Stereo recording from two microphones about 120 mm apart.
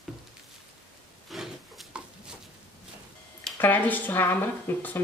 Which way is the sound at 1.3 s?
Centre (ahead or behind).